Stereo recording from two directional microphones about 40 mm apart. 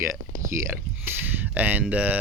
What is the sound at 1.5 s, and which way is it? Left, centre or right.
Speech, right.